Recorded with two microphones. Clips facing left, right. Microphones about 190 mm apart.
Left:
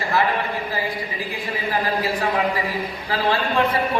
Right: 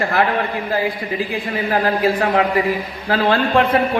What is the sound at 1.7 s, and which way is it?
A man's voice, 55° right (ahead or behind).